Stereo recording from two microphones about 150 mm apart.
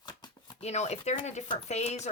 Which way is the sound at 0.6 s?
45° left (ahead or behind).